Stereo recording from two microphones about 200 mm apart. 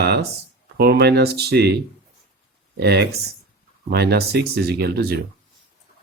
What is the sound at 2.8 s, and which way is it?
Speech, 55° right (ahead or behind).